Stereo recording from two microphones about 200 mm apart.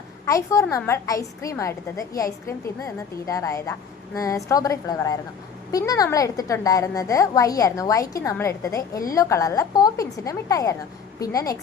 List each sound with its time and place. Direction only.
0.3 s a woman's voice: 15° left (ahead or behind)